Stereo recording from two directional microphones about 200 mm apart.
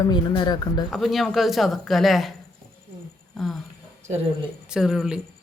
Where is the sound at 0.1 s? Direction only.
20° left (ahead or behind).